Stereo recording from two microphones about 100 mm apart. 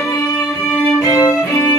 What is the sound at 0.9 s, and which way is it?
Music, 35° left (ahead or behind).